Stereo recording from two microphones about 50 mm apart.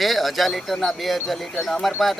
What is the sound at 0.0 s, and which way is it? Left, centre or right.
Speech, centre.